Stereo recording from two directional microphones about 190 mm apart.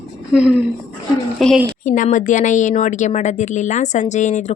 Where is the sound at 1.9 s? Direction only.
40° left (ahead or behind).